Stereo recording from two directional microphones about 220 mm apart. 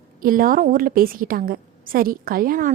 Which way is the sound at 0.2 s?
40° right (ahead or behind).